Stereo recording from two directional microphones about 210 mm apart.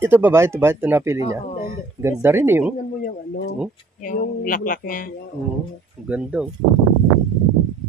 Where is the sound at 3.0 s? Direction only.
45° left (ahead or behind).